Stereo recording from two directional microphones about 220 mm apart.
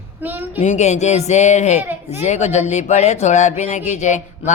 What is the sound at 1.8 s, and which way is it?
Speech, 10° right (ahead or behind).